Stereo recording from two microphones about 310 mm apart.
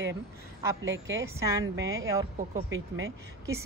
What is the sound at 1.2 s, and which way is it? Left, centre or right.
A woman's voice, centre.